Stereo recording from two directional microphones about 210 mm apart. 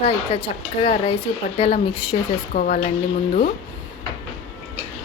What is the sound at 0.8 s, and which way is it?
A woman's voice, 30° left (ahead or behind).